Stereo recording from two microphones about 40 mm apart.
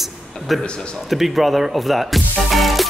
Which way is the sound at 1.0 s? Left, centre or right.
Centre.